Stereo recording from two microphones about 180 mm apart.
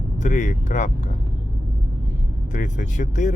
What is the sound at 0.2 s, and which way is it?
Speech, 40° left (ahead or behind).